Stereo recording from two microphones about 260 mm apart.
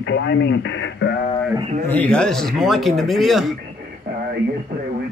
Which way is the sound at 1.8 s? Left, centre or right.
Centre.